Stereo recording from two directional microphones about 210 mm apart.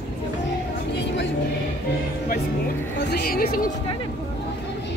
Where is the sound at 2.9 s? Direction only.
50° left (ahead or behind).